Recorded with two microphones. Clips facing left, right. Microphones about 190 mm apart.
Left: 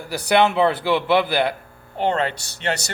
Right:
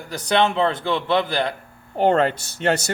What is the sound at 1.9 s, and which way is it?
Speech, 50° right (ahead or behind).